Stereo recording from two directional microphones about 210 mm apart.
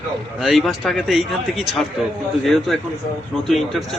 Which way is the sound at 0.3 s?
Centre (ahead or behind).